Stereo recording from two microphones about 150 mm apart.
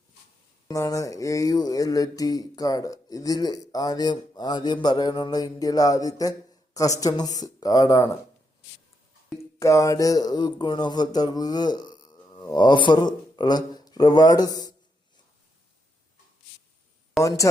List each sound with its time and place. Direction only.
0.7 s speech: 20° left (ahead or behind)
9.4 s speech: 20° left (ahead or behind)
17.2 s speech: 20° left (ahead or behind)